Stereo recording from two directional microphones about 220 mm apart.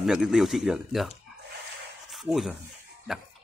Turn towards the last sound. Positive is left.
turn(degrees=0)  # may be behind; listen again after turning